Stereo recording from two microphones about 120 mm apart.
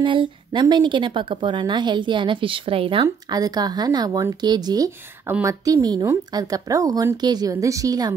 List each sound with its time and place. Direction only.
0.0 s a woman's voice: 45° right (ahead or behind)
3.3 s a woman's voice: 35° right (ahead or behind)